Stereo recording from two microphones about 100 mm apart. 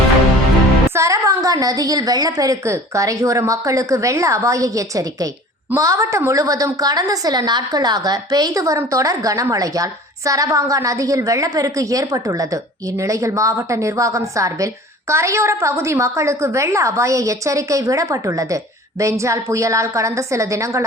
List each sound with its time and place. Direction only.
0.9 s a woman's voice: 30° right (ahead or behind)